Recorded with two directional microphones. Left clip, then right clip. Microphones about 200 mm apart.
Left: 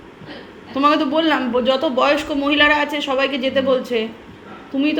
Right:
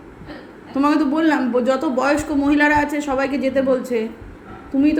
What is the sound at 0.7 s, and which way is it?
A woman's voice, 30° right (ahead or behind).